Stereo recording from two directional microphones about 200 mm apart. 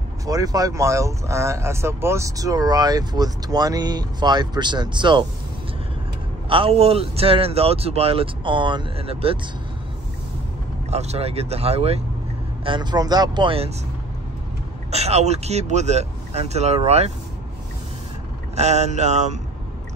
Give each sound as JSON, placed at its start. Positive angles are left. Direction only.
{"t": 0.3, "sound": "speech", "side_deg": -20}
{"t": 6.5, "sound": "speech", "side_deg": -30}
{"t": 10.9, "sound": "speech", "side_deg": -30}
{"t": 14.9, "sound": "speech", "side_deg": -30}
{"t": 18.6, "sound": "speech", "side_deg": -35}